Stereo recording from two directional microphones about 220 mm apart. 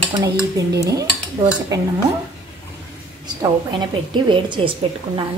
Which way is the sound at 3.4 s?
20° right (ahead or behind).